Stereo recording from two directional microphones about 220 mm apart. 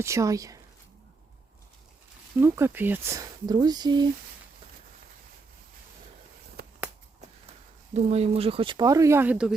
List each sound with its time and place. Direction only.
0.0 s speech: 15° right (ahead or behind)
2.4 s speech: 10° right (ahead or behind)
6.6 s a sound: 45° right (ahead or behind)
7.9 s speech: 30° right (ahead or behind); by 9.6 s 5° right (ahead or behind)